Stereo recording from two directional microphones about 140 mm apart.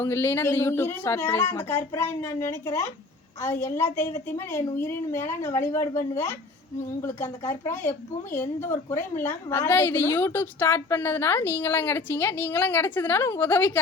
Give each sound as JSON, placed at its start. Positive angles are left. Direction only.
{"t": 0.0, "sound": "speech", "side_deg": 20}
{"t": 7.0, "sound": "a woman's voice", "side_deg": 20}